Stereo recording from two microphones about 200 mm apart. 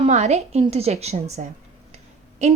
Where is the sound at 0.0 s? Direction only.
35° right (ahead or behind).